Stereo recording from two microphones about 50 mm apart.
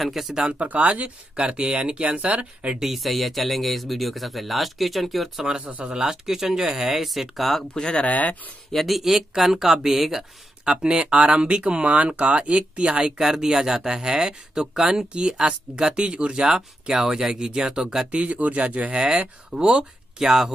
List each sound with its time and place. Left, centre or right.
0.0 s speech: centre
0.3 s speech: right
2.8 s speech: centre
5.6 s speech: right
5.9 s speech: centre
7.7 s speech: centre
8.0 s speech: left
8.7 s speech: centre
18.1 s speech: right; by 20.5 s centre